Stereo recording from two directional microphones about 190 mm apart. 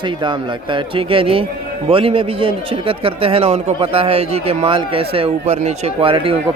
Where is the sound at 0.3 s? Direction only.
25° right (ahead or behind).